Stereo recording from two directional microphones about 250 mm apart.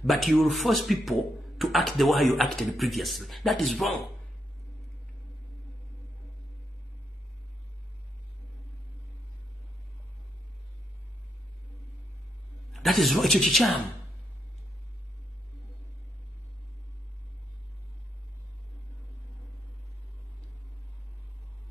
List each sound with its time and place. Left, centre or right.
0.0 s speech: centre
12.7 s speech: centre